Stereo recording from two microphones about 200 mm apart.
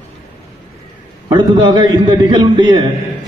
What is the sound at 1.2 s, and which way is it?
A man's voice, 20° right (ahead or behind).